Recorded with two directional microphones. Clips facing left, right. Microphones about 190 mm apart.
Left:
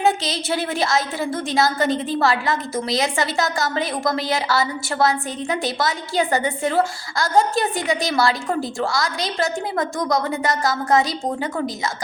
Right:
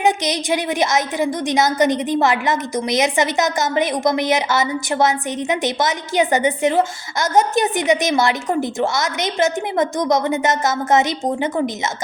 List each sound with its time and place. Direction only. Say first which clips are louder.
0.0 s a woman's voice: right 2 dB; 15° right (ahead or behind)